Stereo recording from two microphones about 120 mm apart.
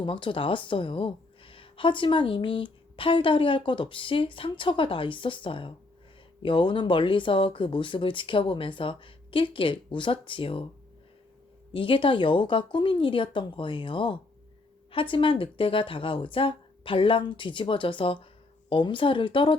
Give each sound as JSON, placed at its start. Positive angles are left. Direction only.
{"t": 0.0, "sound": "a woman's voice", "side_deg": 45}
{"t": 11.7, "sound": "a woman's voice", "side_deg": 45}